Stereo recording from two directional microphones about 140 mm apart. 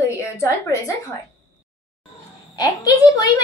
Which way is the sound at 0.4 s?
25° left (ahead or behind).